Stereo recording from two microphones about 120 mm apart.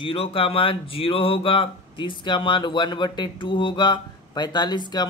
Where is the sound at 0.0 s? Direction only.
50° left (ahead or behind).